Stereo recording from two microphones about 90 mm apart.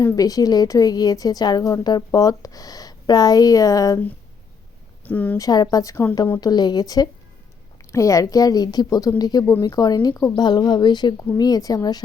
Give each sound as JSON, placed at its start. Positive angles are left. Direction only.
{"t": 0.0, "sound": "a woman's voice", "side_deg": 40}
{"t": 5.0, "sound": "speech", "side_deg": 15}
{"t": 5.4, "sound": "speech", "side_deg": 45}
{"t": 6.4, "sound": "a woman's voice", "side_deg": 50}
{"t": 9.4, "sound": "speech", "side_deg": 30}
{"t": 9.6, "sound": "a woman's voice", "side_deg": 50}
{"t": 10.4, "sound": "a woman's voice", "side_deg": 50}